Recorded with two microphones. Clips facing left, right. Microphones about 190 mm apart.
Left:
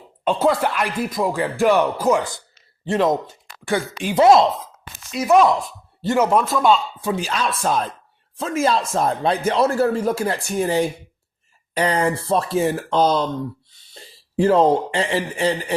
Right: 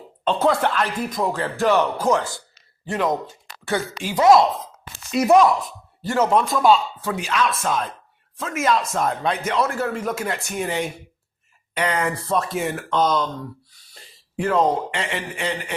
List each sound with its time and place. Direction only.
0.3 s speech: 10° left (ahead or behind)
2.8 s speech: 25° left (ahead or behind)
6.1 s speech: 5° left (ahead or behind)
7.2 s speech: 35° left (ahead or behind)